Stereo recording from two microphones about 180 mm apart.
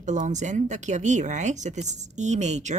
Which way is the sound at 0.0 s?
40° right (ahead or behind).